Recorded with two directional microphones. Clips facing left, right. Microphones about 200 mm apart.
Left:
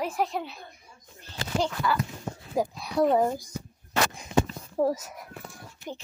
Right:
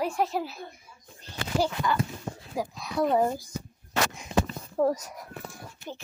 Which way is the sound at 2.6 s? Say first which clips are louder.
Left 4 dB; 25° left (ahead or behind).